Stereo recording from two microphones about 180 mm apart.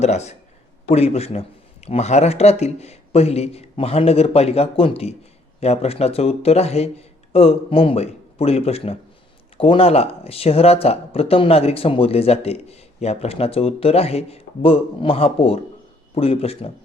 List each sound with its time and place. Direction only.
0.0 s speech: 35° left (ahead or behind)